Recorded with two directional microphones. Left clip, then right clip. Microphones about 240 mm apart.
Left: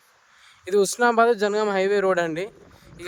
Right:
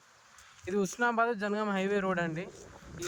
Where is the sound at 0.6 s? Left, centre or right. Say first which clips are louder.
Left 11 dB; left.